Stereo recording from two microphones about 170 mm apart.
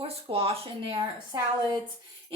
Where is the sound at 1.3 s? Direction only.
25° right (ahead or behind).